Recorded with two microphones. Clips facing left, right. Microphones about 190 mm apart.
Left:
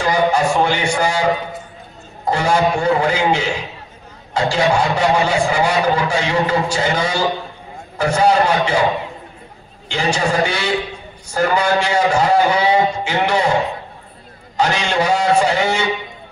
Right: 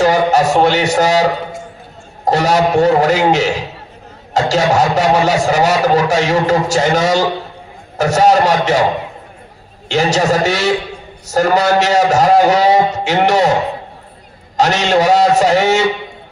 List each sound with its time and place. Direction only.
0.0 s a man's voice: 40° right (ahead or behind)
9.8 s a man's voice: 40° right (ahead or behind)
14.6 s a man's voice: 40° right (ahead or behind)